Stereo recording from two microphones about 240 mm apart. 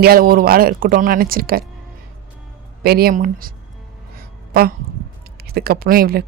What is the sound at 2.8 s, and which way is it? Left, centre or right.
Speech, right.